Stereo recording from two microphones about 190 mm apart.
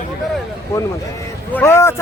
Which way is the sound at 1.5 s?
10° left (ahead or behind).